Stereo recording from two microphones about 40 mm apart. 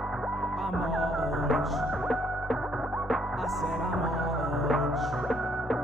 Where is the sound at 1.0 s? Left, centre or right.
Centre.